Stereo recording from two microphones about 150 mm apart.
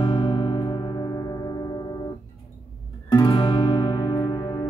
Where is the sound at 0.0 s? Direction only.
35° left (ahead or behind).